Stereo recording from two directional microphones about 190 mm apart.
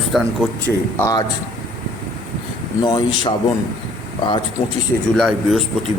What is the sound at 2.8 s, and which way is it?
Speech, 25° left (ahead or behind).